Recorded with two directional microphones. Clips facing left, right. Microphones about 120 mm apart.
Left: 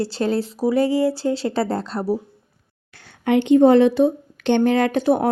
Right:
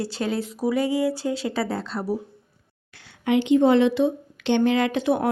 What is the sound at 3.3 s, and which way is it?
A woman's voice, 55° left (ahead or behind).